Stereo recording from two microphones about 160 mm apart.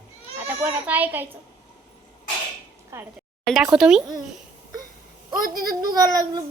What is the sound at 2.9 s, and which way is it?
Speech, 15° right (ahead or behind).